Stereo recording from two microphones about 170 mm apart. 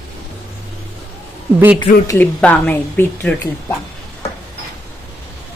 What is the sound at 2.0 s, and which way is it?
Speech, 20° left (ahead or behind).